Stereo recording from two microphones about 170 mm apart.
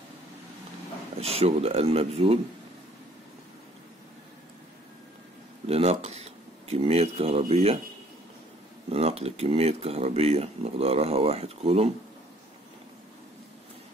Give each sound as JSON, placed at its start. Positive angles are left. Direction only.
{"t": 1.1, "sound": "speech", "side_deg": -35}
{"t": 5.7, "sound": "speech", "side_deg": -40}
{"t": 8.8, "sound": "speech", "side_deg": -35}